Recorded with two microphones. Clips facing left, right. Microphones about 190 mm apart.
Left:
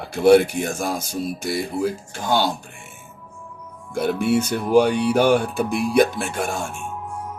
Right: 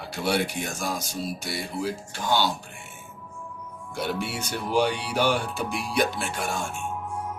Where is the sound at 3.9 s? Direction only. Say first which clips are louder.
Left 10 dB; 50° left (ahead or behind).